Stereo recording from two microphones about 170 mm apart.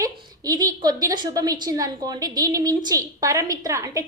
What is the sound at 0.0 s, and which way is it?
A woman's voice, 20° right (ahead or behind).